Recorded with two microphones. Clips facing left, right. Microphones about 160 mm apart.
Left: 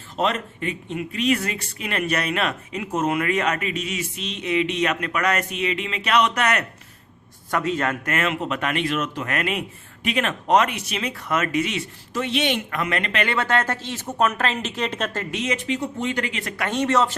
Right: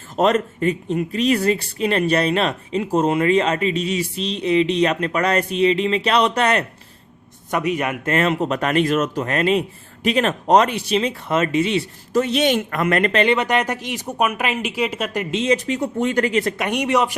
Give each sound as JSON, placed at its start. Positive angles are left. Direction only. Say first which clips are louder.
{"t": 0.2, "sound": "speech", "louder": "right 7 dB", "side_deg": -45}
{"t": 7.5, "sound": "speech", "louder": "right 2 dB", "side_deg": -15}
{"t": 8.0, "sound": "speech", "louder": "right 5 dB", "side_deg": -35}
{"t": 13.2, "sound": "speech", "louder": "right 4 dB", "side_deg": -15}
{"t": 15.5, "sound": "speech", "louder": "right 5 dB", "side_deg": -45}
{"t": 16.6, "sound": "speech", "louder": "right 2 dB", "side_deg": -15}